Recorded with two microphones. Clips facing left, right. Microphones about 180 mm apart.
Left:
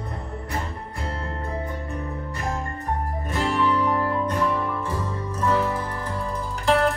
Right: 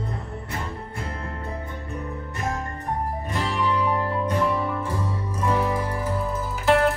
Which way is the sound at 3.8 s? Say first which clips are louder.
Left 1 dB; 15° right (ahead or behind).